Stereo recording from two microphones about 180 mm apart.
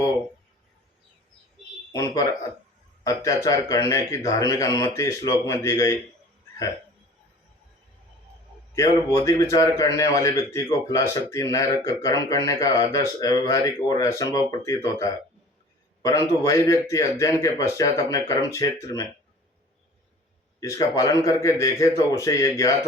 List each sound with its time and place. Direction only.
1.9 s a man's voice: 20° left (ahead or behind)
8.7 s a man's voice: 15° left (ahead or behind)
20.6 s a man's voice: 20° left (ahead or behind)